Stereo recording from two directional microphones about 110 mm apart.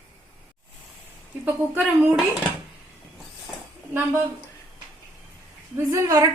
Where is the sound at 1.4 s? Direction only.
15° right (ahead or behind).